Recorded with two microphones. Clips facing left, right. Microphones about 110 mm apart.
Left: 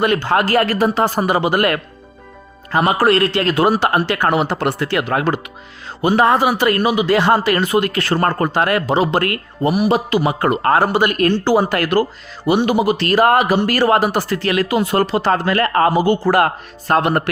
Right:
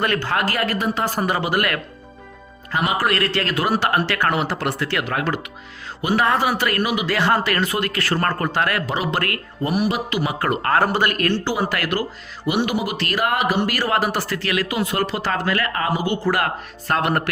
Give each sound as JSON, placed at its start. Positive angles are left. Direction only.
{"t": 0.0, "sound": "speech", "side_deg": 20}
{"t": 2.7, "sound": "a man's voice", "side_deg": 40}
{"t": 3.1, "sound": "speech", "side_deg": 25}
{"t": 6.3, "sound": "speech", "side_deg": 15}
{"t": 10.9, "sound": "speech", "side_deg": 20}
{"t": 11.6, "sound": "speech", "side_deg": 30}
{"t": 16.9, "sound": "speech", "side_deg": 25}